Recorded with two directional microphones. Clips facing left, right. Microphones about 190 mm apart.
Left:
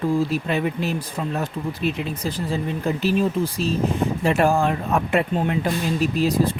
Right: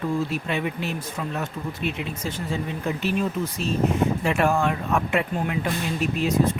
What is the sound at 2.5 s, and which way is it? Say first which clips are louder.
Speech: left 3 dB; 35° left (ahead or behind).